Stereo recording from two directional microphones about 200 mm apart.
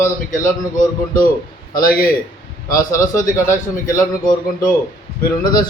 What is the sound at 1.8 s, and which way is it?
Speech, 45° left (ahead or behind).